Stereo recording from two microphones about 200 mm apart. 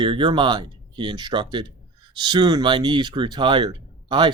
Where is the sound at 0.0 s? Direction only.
25° right (ahead or behind).